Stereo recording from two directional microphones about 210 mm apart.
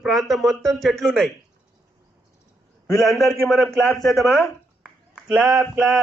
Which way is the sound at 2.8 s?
Centre (ahead or behind).